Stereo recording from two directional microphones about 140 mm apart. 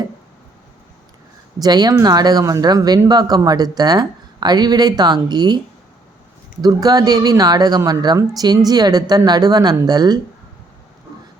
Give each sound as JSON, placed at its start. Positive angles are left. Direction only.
{"t": 1.6, "sound": "speech", "side_deg": -30}
{"t": 6.6, "sound": "speech", "side_deg": -30}